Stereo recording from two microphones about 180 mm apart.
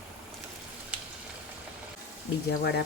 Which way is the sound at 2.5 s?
65° left (ahead or behind).